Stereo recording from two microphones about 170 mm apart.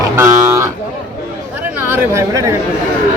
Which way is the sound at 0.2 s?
20° right (ahead or behind).